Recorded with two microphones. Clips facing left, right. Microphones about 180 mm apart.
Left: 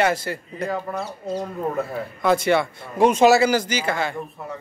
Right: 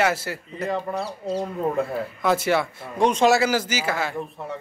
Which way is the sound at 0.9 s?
30° right (ahead or behind).